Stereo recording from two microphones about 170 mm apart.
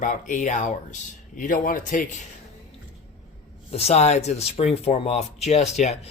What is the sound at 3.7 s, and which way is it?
Speech, 40° left (ahead or behind).